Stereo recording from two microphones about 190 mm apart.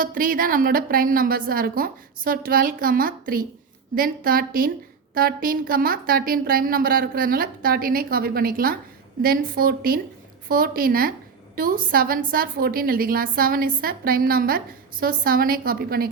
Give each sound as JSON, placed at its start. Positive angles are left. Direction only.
{"t": 0.0, "sound": "a woman's voice", "side_deg": -45}